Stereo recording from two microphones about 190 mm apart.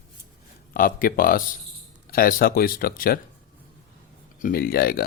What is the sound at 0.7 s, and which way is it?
Speech, 50° left (ahead or behind).